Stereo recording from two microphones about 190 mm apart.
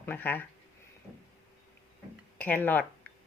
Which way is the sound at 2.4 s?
10° left (ahead or behind).